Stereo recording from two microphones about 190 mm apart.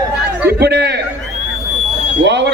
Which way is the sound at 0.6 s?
60° right (ahead or behind).